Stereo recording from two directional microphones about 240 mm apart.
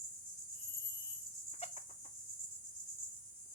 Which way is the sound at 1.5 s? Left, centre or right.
Left.